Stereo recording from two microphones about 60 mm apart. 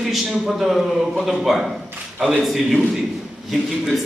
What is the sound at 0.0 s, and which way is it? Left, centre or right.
A man's voice, centre.